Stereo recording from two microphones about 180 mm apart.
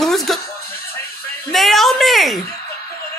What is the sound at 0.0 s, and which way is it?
Music, centre (ahead or behind).